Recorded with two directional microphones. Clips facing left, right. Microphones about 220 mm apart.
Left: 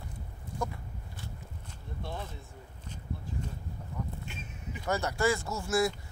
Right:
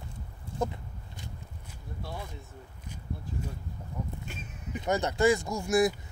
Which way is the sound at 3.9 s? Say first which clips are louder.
Right 1 dB; 15° right (ahead or behind).